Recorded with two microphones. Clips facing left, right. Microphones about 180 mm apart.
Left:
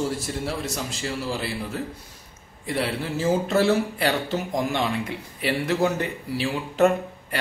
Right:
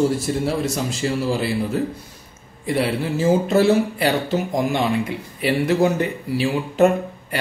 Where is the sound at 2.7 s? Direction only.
10° right (ahead or behind).